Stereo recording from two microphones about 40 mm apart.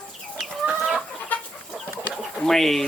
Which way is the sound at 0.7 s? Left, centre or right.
Centre.